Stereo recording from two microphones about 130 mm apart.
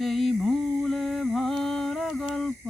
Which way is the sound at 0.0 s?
Centre (ahead or behind).